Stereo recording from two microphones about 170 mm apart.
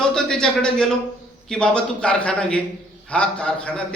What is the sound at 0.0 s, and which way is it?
A man's voice, 5° left (ahead or behind).